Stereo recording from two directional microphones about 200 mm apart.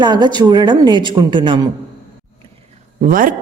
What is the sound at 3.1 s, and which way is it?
Speech, 45° right (ahead or behind).